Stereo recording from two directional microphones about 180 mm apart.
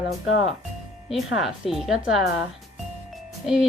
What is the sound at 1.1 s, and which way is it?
Speech, centre (ahead or behind).